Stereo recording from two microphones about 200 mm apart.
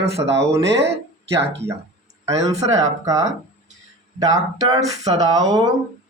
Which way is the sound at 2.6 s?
15° right (ahead or behind).